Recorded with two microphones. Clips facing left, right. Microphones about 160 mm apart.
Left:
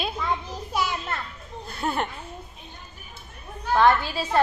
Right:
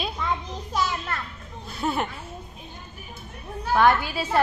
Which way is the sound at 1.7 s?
Centre (ahead or behind).